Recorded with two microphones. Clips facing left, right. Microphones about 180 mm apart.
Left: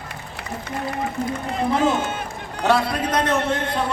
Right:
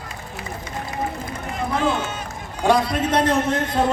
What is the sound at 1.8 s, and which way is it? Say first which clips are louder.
Speech: even; 45° left (ahead or behind).